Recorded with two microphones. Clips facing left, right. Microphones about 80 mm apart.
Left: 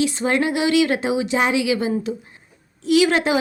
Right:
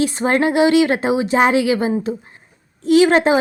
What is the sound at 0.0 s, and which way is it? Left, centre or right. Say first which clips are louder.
A woman's voice: right 3 dB; right.